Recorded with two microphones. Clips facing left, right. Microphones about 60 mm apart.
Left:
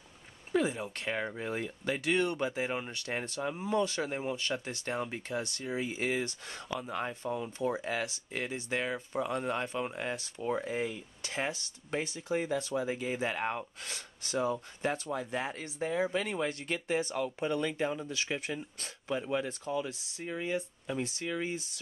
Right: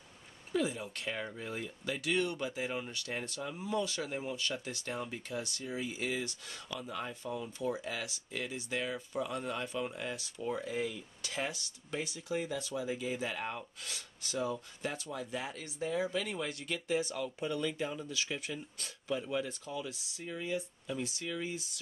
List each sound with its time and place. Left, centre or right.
0.5 s speech: left